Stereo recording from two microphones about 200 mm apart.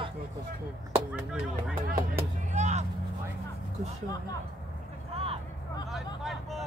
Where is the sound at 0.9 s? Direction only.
5° right (ahead or behind).